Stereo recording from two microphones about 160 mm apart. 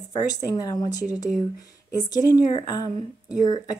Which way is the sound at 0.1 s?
25° left (ahead or behind).